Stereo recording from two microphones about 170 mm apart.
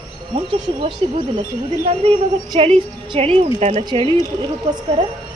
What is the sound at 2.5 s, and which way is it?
A woman's voice, 30° right (ahead or behind).